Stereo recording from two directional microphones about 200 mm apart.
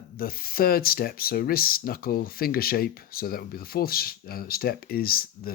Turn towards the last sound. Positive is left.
turn(degrees=50)  # may be behind; listen again after turning